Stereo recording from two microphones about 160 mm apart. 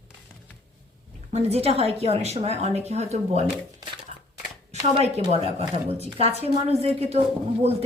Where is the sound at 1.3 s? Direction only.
40° right (ahead or behind).